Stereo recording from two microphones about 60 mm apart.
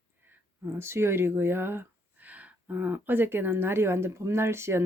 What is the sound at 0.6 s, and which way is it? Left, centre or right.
Speech, right.